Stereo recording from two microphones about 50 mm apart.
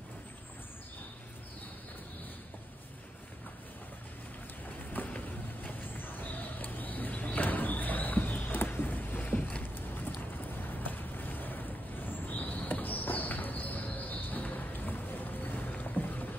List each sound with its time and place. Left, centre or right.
4.9 s vehicle: left